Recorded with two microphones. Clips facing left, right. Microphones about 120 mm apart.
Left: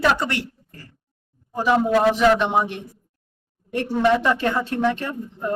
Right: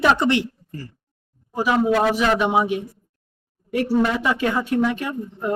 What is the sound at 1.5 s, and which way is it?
Speech, 5° right (ahead or behind).